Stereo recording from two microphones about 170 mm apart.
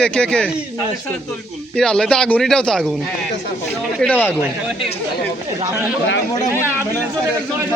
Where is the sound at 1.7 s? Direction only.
5° left (ahead or behind).